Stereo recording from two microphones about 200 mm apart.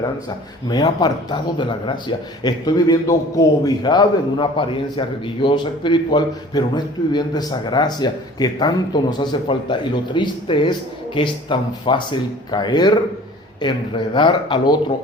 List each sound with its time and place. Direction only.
0.7 s a man's voice: 20° left (ahead or behind)